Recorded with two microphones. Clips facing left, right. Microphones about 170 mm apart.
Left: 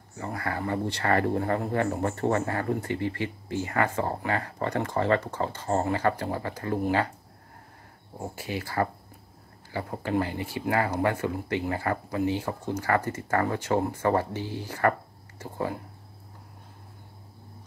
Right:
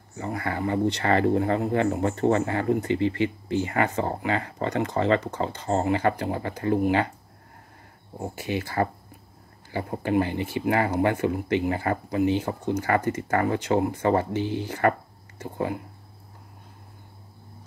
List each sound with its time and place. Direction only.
0.2 s speech: 20° right (ahead or behind)
8.2 s speech: 20° right (ahead or behind)